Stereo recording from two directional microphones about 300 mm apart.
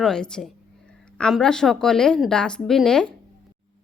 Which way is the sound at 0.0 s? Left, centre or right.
Centre.